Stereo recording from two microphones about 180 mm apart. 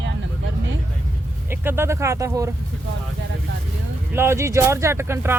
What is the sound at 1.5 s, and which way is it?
Speech, 15° right (ahead or behind).